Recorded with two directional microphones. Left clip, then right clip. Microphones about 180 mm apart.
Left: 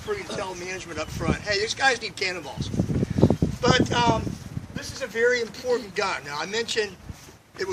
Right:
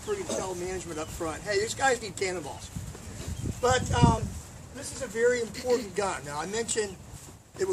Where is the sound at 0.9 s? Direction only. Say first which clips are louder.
Left 5 dB; 15° left (ahead or behind).